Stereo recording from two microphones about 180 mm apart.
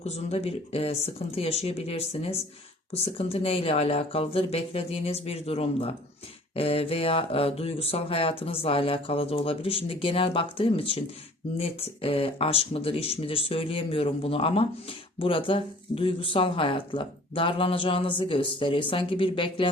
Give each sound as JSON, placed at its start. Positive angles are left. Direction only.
{"t": 0.0, "sound": "speech", "side_deg": 35}